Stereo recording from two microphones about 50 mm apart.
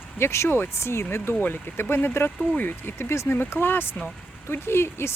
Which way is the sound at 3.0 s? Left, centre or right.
Left.